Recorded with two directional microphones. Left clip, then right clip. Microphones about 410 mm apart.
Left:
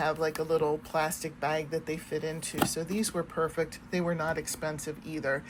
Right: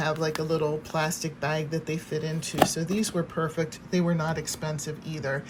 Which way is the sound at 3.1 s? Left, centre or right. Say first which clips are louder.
Left 1 dB; right.